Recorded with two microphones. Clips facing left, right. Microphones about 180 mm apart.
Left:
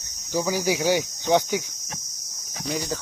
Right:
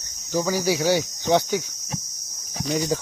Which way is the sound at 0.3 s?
15° left (ahead or behind).